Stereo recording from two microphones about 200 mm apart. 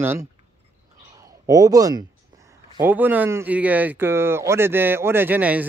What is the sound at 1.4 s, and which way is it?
Speech, 15° right (ahead or behind).